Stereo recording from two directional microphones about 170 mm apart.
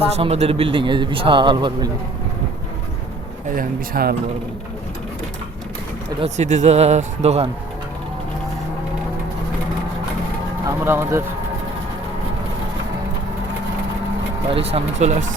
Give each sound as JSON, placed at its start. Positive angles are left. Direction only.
{"t": 0.2, "sound": "a man's voice", "side_deg": -35}
{"t": 3.5, "sound": "a man's voice", "side_deg": -60}
{"t": 6.1, "sound": "speech", "side_deg": -40}
{"t": 10.7, "sound": "speech", "side_deg": -15}
{"t": 14.5, "sound": "speech", "side_deg": -35}